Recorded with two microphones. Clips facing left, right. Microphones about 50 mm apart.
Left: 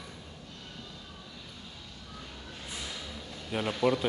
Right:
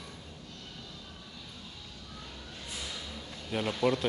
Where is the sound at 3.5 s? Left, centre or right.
Centre.